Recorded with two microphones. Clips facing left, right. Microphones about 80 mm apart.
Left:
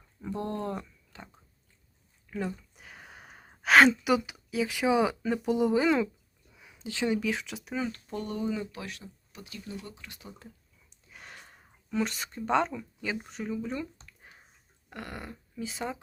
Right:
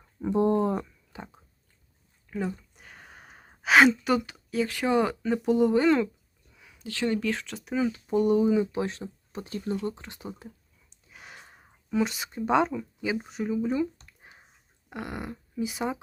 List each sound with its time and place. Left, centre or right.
0.2 s speech: centre
2.3 s gasp: centre
4.0 s speech: centre
6.5 s speech: centre
8.0 s speech: centre
11.1 s a sound: centre
12.4 s speech: centre